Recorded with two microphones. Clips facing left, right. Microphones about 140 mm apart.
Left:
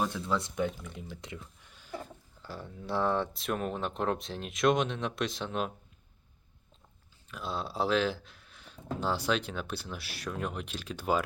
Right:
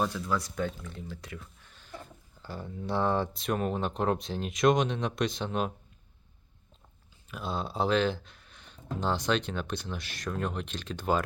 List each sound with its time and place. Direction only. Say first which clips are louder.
0.0 s speech: right 1 dB; 20° left (ahead or behind)
0.6 s speech: left 1 dB; 15° left (ahead or behind)
2.4 s speech: right 4 dB; centre (ahead or behind)
7.3 s speech: right 2 dB; centre (ahead or behind)